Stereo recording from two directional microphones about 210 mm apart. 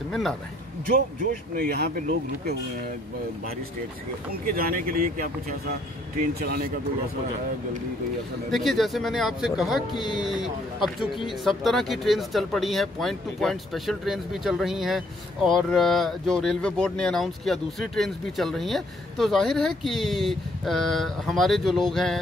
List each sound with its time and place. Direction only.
0.1 s a man's voice: centre (ahead or behind)
1.6 s speech: 45° right (ahead or behind)
4.3 s speech: 45° right (ahead or behind)
6.4 s speech: 45° right (ahead or behind)
8.5 s speech: centre (ahead or behind)